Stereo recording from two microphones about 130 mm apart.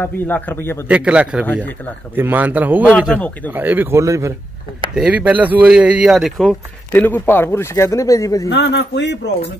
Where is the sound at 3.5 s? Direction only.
15° right (ahead or behind).